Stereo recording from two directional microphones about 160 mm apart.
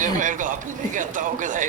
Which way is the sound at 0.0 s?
55° right (ahead or behind).